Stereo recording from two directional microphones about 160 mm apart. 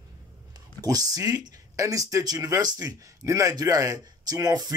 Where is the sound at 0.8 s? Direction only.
20° right (ahead or behind).